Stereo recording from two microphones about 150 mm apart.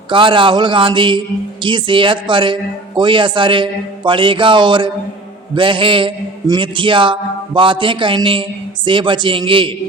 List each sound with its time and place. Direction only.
0.1 s a man's voice: 35° right (ahead or behind)